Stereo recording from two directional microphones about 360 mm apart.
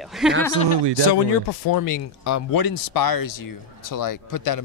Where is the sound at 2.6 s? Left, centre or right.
Left.